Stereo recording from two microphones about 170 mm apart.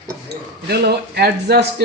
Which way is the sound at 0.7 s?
75° right (ahead or behind).